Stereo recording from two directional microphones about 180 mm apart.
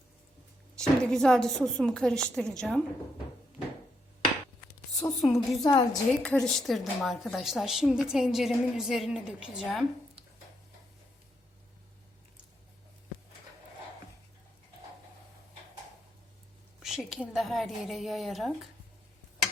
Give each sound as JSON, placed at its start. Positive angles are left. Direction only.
{"t": 0.8, "sound": "a woman's voice", "side_deg": 5}
{"t": 5.2, "sound": "a woman's voice", "side_deg": 0}
{"t": 5.6, "sound": "a woman's voice", "side_deg": 20}
{"t": 6.2, "sound": "a woman's voice", "side_deg": 5}
{"t": 16.8, "sound": "a woman's voice", "side_deg": 0}